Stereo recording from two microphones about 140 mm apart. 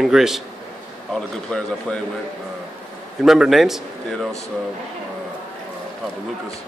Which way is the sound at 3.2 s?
Centre (ahead or behind).